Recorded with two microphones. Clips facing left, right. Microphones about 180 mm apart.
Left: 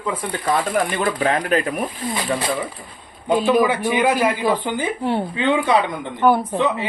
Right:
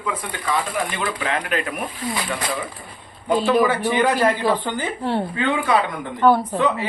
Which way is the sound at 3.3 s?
15° left (ahead or behind).